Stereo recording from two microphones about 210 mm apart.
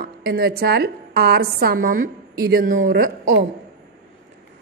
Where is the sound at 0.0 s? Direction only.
50° right (ahead or behind).